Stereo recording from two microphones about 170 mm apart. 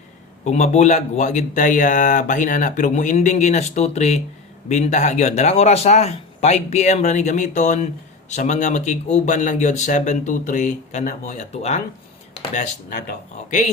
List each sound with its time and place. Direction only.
0.4 s speech: 40° left (ahead or behind)
12.9 s speech: 65° left (ahead or behind)